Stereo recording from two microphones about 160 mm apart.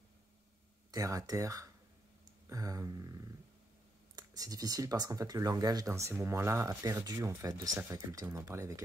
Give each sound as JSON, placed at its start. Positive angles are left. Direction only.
{"t": 0.9, "sound": "speech", "side_deg": -20}
{"t": 2.4, "sound": "a sound", "side_deg": -20}
{"t": 4.1, "sound": "speech", "side_deg": -25}